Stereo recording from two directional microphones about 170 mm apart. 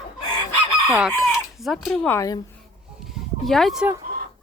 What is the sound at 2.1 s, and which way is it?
Speech, 20° left (ahead or behind).